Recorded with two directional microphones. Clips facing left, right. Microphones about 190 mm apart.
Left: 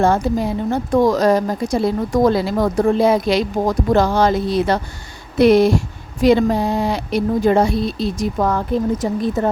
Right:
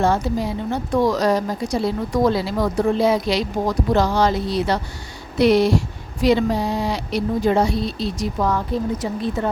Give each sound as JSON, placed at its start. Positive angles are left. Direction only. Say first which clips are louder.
{"t": 0.0, "sound": "speech", "louder": "left 3 dB", "side_deg": 50}